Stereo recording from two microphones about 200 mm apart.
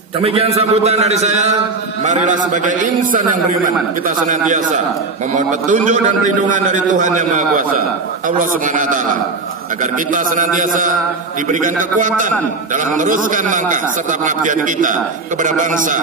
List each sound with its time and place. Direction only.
0.2 s a man's voice: 30° right (ahead or behind)
10.1 s a man's voice: 40° right (ahead or behind)